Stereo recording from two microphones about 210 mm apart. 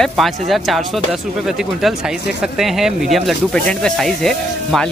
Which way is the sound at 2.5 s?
Centre (ahead or behind).